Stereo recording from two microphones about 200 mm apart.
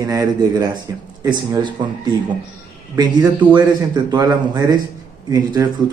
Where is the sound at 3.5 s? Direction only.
20° right (ahead or behind).